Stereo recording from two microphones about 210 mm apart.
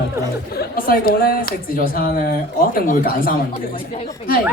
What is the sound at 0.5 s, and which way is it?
Speech, 45° left (ahead or behind).